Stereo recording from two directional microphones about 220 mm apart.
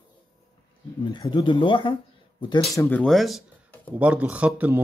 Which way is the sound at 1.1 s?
20° left (ahead or behind).